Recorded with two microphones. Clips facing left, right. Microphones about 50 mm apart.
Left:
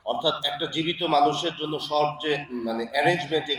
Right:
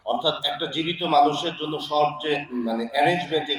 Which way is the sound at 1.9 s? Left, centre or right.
Left.